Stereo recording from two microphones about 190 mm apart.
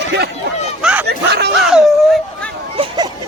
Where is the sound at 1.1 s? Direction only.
60° right (ahead or behind).